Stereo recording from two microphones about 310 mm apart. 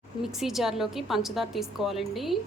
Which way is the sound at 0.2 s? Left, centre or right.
Centre.